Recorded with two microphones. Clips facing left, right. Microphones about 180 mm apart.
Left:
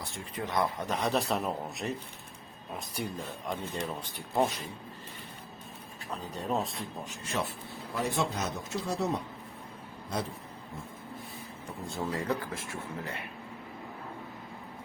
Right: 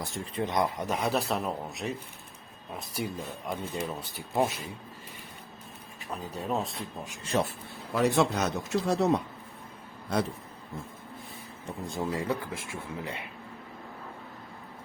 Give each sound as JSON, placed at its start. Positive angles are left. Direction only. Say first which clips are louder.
{"t": 0.3, "sound": "a man's voice", "louder": "right 2 dB", "side_deg": -20}
{"t": 6.1, "sound": "a man's voice", "louder": "right 1 dB", "side_deg": 0}
{"t": 7.3, "sound": "speech", "louder": "right 6 dB", "side_deg": -40}
{"t": 7.9, "sound": "speech", "louder": "right 7 dB", "side_deg": -70}
{"t": 11.9, "sound": "speech", "louder": "right 1 dB", "side_deg": -15}